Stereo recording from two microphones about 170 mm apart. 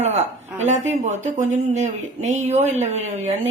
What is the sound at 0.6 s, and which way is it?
Speech, 45° right (ahead or behind).